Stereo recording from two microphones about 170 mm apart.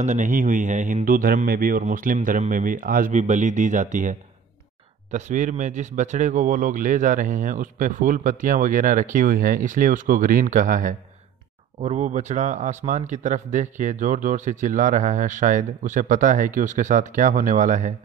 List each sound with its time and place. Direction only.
0.0 s speech: 45° right (ahead or behind)